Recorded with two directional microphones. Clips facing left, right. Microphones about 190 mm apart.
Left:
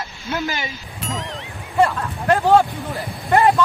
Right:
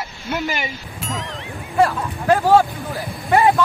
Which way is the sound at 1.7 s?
Centre (ahead or behind).